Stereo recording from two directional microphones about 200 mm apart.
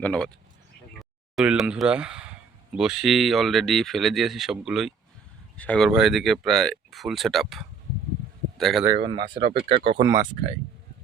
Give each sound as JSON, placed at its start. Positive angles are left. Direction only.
{"t": 0.0, "sound": "a man's voice", "side_deg": 5}
{"t": 8.8, "sound": "speech", "side_deg": -20}